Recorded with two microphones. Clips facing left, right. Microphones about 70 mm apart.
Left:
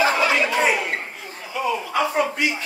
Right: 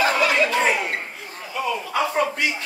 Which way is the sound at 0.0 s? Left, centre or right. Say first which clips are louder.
Even; centre.